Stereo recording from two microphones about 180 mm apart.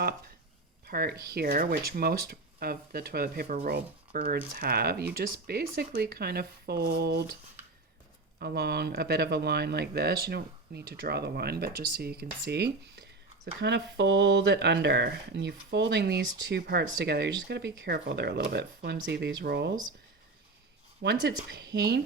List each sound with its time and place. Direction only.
0.9 s speech: 60° right (ahead or behind)
8.4 s speech: 60° right (ahead or behind)
21.0 s speech: 65° right (ahead or behind)